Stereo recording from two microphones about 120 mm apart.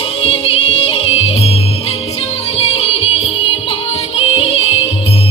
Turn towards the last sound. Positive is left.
turn(degrees=55)  # may be behind; listen again after turning